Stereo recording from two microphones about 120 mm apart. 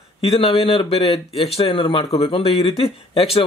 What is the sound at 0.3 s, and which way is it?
Speech, 45° left (ahead or behind).